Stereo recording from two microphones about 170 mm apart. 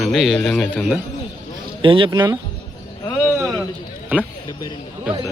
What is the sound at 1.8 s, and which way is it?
Speech, 30° right (ahead or behind).